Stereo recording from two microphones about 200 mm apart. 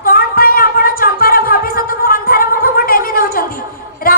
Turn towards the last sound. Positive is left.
turn(degrees=45)  # may be behind; listen again after turning